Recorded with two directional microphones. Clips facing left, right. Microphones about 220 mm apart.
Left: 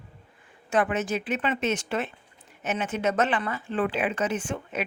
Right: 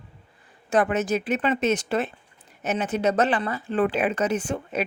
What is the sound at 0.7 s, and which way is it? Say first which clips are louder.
A woman's voice: right 3 dB; 40° right (ahead or behind).